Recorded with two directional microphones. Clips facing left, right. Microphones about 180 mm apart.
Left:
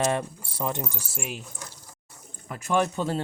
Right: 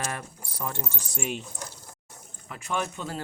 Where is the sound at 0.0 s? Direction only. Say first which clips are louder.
Left 9 dB; 20° left (ahead or behind); by 1.5 s 5° left (ahead or behind).